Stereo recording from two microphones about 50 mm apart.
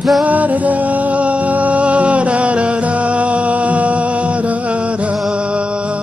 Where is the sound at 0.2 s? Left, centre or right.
Right.